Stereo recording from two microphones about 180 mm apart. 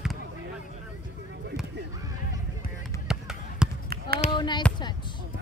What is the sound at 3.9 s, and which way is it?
Basketball bounce, 55° right (ahead or behind).